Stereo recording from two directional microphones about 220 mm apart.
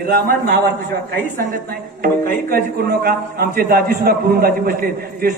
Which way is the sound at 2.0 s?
40° right (ahead or behind).